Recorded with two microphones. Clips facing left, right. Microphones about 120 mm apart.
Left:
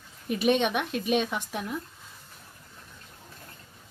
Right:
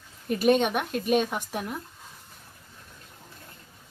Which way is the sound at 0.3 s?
45° right (ahead or behind).